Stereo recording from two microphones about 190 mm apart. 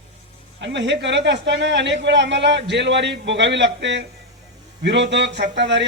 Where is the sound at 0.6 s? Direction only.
70° right (ahead or behind).